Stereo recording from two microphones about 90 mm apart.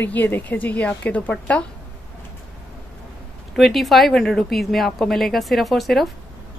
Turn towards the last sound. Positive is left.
turn(degrees=0)  # may be behind; listen again after turning